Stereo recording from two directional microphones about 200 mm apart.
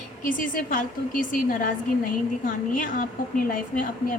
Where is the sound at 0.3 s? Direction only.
45° left (ahead or behind).